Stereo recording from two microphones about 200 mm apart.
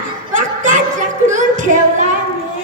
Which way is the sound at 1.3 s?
40° right (ahead or behind).